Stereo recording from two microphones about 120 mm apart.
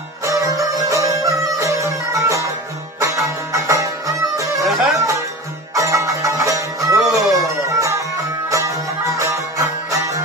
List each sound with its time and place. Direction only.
0.2 s music: 25° right (ahead or behind)
4.6 s music: centre (ahead or behind)
4.9 s music: 25° right (ahead or behind)
8.5 s music: 25° right (ahead or behind)